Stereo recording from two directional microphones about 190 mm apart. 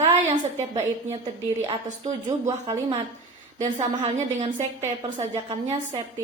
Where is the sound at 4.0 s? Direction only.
35° right (ahead or behind).